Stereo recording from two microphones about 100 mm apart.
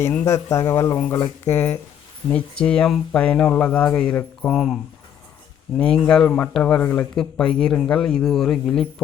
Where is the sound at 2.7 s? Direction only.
5° left (ahead or behind).